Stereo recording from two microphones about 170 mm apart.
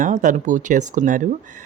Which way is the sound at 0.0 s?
50° right (ahead or behind).